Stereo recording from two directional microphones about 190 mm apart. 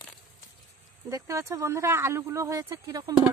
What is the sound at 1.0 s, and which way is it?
Speech, 15° right (ahead or behind).